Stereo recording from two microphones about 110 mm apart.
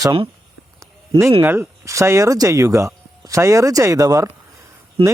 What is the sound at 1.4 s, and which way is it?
Speech, 20° right (ahead or behind).